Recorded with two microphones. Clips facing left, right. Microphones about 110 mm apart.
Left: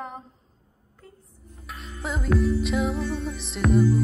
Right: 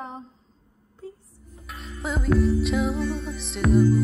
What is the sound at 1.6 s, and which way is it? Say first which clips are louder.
Music: right 1 dB; centre (ahead or behind).